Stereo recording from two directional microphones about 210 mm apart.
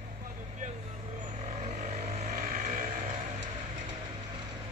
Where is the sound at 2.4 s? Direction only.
45° right (ahead or behind).